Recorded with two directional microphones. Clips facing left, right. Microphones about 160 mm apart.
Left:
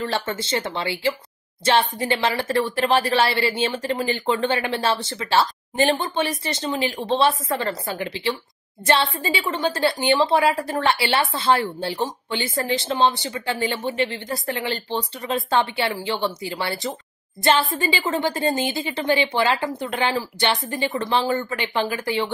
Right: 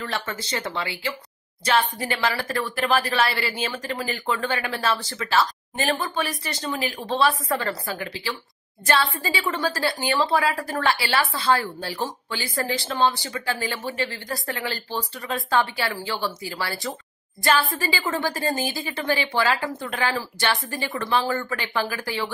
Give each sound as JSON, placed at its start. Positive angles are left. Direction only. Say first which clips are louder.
{"t": 0.0, "sound": "speech", "louder": "left 5 dB", "side_deg": 25}